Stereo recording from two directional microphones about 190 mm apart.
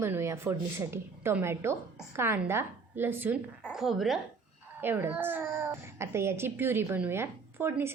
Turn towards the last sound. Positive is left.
turn(degrees=-10)  # may be behind; listen again after turning